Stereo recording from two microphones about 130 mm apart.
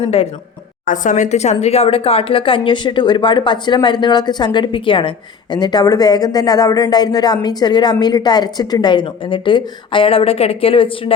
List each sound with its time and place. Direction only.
0.0 s a woman's voice: 55° left (ahead or behind)
0.9 s speech: 75° left (ahead or behind); by 11.1 s 45° left (ahead or behind)